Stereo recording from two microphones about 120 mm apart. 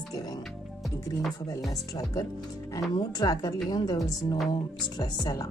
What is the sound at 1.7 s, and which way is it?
A woman's voice, 30° left (ahead or behind).